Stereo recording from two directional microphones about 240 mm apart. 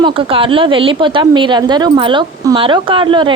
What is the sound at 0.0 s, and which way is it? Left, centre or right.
Speech, right.